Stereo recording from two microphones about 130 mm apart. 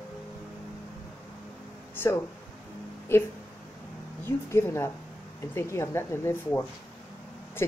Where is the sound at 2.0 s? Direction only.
15° left (ahead or behind).